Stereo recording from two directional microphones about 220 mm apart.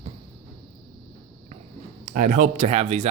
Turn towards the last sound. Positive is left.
turn(degrees=-30)  # may be behind; listen again after turning